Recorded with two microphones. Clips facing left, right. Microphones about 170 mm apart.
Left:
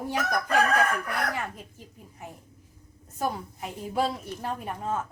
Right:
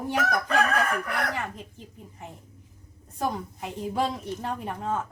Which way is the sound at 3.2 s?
5° left (ahead or behind).